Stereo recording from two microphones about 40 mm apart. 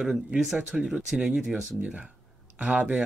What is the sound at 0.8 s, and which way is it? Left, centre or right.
Speech, right.